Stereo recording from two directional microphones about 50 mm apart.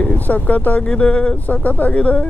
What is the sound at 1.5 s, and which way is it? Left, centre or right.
Speech, left.